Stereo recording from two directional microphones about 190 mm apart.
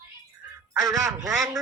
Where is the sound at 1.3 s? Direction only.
Centre (ahead or behind).